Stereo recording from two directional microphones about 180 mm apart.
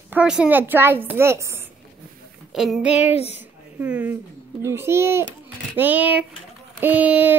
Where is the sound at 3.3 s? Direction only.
10° right (ahead or behind).